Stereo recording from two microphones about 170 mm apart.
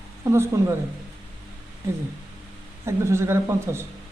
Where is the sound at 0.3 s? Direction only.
15° right (ahead or behind).